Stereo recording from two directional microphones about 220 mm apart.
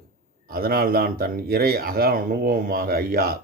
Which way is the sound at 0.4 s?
40° right (ahead or behind).